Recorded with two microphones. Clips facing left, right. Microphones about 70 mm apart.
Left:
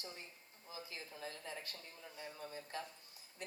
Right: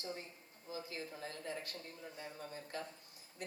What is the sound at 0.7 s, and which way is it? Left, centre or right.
Speech, right.